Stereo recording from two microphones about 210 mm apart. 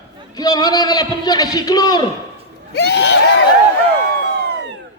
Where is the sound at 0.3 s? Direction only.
20° left (ahead or behind).